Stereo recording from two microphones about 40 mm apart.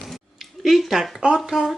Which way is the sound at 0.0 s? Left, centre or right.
Centre.